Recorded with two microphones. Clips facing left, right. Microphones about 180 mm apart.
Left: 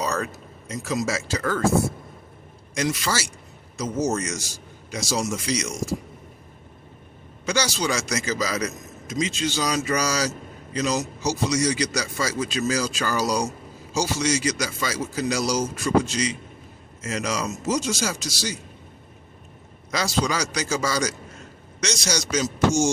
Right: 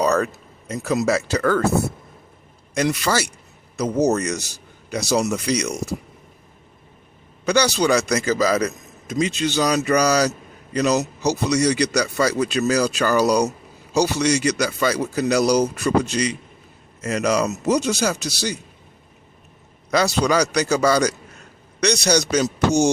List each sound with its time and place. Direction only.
0.0 s a sound: 60° right (ahead or behind)
0.7 s speech: 60° right (ahead or behind)
2.7 s speech: 60° right (ahead or behind)
7.4 s speech: 60° right (ahead or behind)
19.9 s speech: 60° right (ahead or behind)